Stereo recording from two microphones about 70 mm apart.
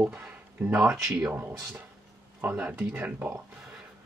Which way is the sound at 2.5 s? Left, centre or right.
Right.